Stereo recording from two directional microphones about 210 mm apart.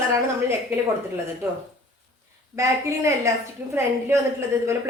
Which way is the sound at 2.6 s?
15° right (ahead or behind).